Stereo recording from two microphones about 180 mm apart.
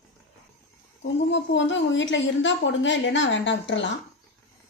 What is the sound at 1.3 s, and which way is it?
A woman's voice, 90° left.